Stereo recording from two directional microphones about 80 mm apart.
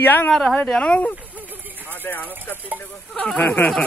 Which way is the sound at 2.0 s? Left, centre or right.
Left.